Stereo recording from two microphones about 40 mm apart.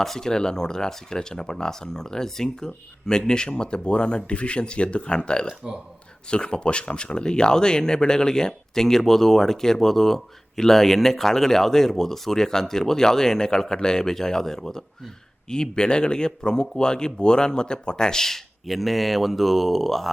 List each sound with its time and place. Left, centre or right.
0.0 s speech: centre
18.6 s speech: centre